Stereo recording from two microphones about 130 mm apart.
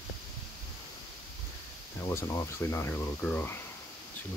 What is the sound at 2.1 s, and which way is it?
Speech, 20° left (ahead or behind).